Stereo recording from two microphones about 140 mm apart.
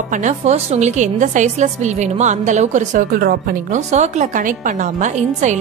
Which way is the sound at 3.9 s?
55° right (ahead or behind).